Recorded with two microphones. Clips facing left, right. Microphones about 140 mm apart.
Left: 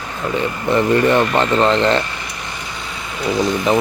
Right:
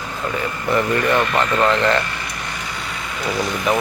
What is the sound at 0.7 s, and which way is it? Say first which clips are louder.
Speech: left 4 dB; 25° left (ahead or behind).